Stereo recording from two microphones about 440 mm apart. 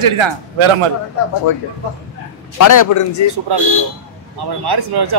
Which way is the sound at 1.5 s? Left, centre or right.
Left.